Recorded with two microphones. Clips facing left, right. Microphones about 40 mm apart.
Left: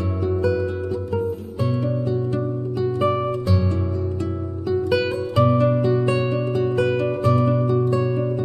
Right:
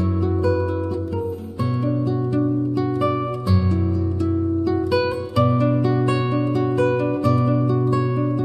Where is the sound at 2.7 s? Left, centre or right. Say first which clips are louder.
Even; left.